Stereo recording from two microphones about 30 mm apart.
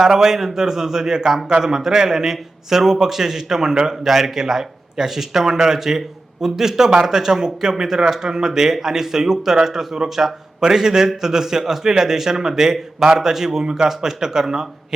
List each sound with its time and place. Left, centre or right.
0.0 s a man's voice: centre
1.7 s a man's voice: centre